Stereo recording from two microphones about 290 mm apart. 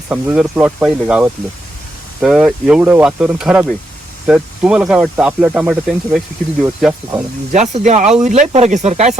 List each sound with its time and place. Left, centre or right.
0.1 s speech: centre
7.5 s speech: right